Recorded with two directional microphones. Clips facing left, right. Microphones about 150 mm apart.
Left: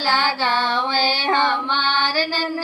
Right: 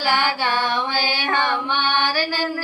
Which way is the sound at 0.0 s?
15° right (ahead or behind).